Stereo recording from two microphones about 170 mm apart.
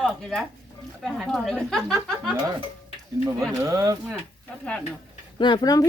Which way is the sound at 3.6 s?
20° right (ahead or behind).